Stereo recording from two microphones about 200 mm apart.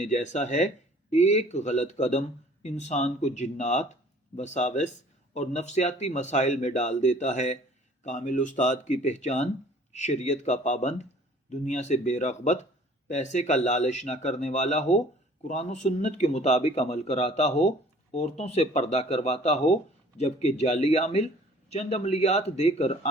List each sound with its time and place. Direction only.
0.0 s speech: 35° left (ahead or behind)